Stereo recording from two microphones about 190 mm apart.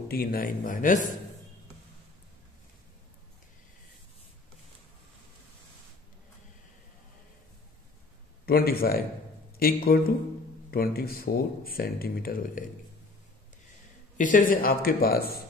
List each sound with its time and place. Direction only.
0.1 s speech: 50° left (ahead or behind)
8.5 s speech: 50° left (ahead or behind)
14.1 s speech: 45° left (ahead or behind)